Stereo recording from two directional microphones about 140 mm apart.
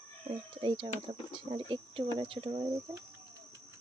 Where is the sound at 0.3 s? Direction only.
35° right (ahead or behind).